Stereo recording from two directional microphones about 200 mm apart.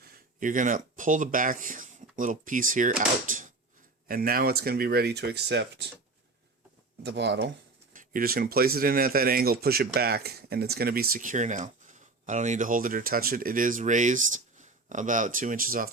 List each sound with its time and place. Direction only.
0.0 s speech: 45° right (ahead or behind)
7.0 s speech: 60° right (ahead or behind)
7.9 s speech: 45° right (ahead or behind)